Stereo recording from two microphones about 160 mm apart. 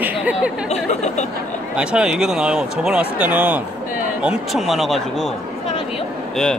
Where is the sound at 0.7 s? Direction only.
45° left (ahead or behind).